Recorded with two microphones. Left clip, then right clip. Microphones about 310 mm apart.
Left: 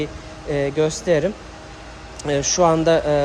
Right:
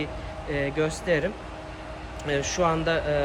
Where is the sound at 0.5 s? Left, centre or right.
Centre.